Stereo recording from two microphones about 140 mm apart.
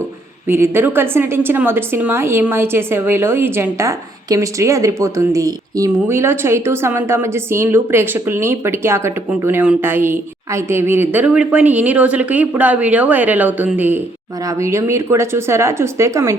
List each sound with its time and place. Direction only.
0.4 s a woman's voice: 15° right (ahead or behind)